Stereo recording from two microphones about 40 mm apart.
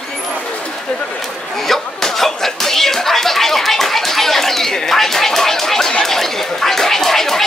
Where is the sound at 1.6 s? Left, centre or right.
Centre.